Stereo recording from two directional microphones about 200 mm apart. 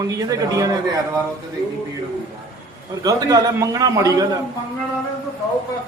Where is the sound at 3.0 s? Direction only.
15° right (ahead or behind).